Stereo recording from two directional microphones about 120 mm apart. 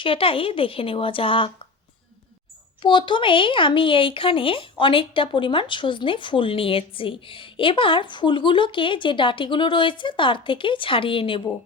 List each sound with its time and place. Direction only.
0.0 s a woman's voice: 50° left (ahead or behind)
2.8 s a woman's voice: 40° left (ahead or behind)